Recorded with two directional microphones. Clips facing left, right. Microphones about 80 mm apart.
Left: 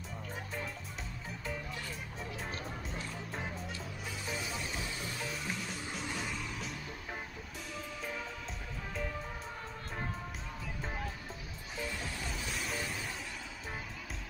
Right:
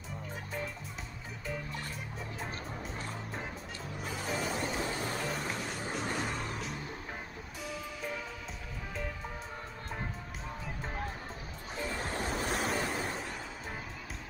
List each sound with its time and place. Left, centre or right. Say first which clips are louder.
2.6 s music: right 1 dB; centre
4.4 s a sound: right 6 dB; right
6.0 s music: right 3 dB; right
11.9 s waves: right 6 dB; right